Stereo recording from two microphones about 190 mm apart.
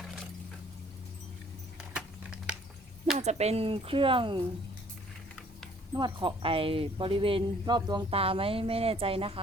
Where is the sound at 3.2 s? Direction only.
35° right (ahead or behind).